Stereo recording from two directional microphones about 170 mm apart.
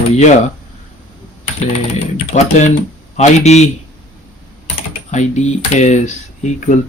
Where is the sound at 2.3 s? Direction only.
45° left (ahead or behind).